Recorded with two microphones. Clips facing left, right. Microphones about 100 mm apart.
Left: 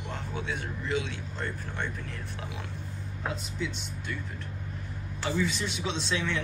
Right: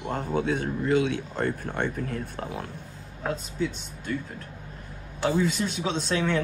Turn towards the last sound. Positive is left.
turn(degrees=-45)  # may be behind; listen again after turning